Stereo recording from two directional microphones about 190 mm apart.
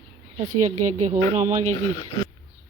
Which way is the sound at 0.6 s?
40° right (ahead or behind).